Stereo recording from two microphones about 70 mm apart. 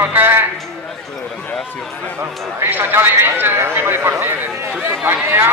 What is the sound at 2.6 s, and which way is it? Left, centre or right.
A man's voice, right.